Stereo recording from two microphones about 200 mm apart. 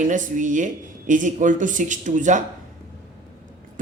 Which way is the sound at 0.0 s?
40° right (ahead or behind).